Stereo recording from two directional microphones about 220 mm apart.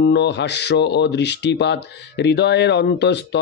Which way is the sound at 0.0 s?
50° left (ahead or behind).